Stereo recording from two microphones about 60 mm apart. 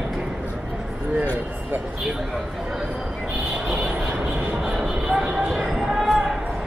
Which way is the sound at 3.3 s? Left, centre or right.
Centre.